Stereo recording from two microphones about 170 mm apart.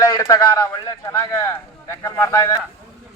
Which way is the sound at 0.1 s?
20° left (ahead or behind).